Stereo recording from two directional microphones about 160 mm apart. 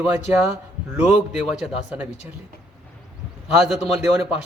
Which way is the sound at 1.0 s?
5° right (ahead or behind).